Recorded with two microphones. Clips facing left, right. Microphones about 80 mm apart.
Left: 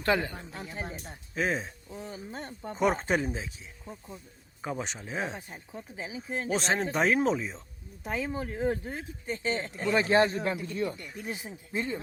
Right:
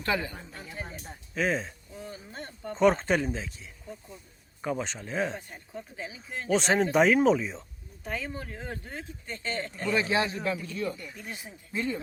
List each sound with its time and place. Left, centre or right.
0.0 s a man's voice: left
0.3 s speech: centre
2.0 s speech: left
4.6 s speech: centre
6.5 s speech: centre
8.0 s speech: centre
9.9 s a man's voice: left
11.1 s a man's voice: left